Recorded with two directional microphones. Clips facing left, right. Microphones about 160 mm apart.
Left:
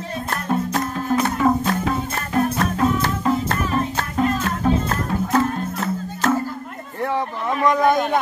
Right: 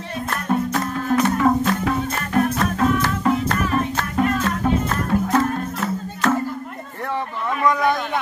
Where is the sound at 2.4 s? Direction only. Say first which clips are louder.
Left 1 dB; 30° left (ahead or behind).